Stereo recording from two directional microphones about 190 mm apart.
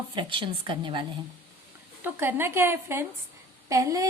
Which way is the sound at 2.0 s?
10° right (ahead or behind).